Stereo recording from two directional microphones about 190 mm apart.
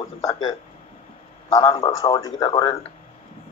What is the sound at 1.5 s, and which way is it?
Speech, 30° left (ahead or behind).